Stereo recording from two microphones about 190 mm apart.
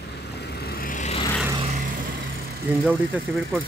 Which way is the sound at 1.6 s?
40° right (ahead or behind).